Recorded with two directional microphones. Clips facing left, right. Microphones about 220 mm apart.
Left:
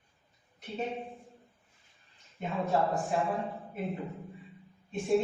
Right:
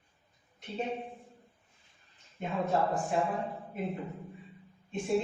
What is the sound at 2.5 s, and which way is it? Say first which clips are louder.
Speech: even; centre (ahead or behind).